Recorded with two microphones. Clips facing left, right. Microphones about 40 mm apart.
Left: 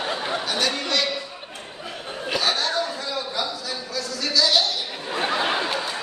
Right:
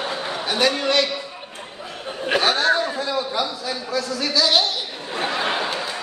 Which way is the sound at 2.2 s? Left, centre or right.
Right.